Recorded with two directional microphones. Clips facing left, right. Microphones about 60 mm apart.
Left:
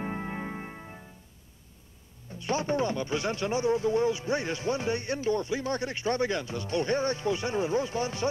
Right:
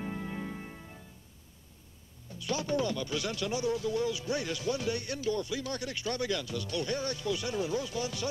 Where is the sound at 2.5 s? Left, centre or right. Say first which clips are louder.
Left 3 dB; left.